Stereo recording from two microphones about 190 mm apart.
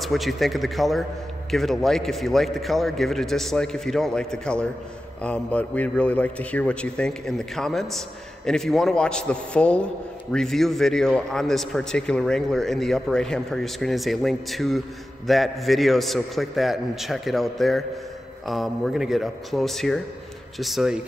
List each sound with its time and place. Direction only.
0.0 s speech: centre (ahead or behind)